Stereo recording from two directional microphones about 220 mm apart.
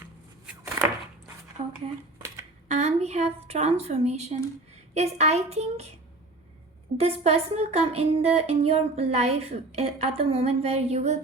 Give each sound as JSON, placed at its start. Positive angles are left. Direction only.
{"t": 0.0, "sound": "a sound", "side_deg": -10}
{"t": 1.6, "sound": "dishes", "side_deg": -30}
{"t": 2.6, "sound": "a woman's voice", "side_deg": -30}
{"t": 6.9, "sound": "speech", "side_deg": -30}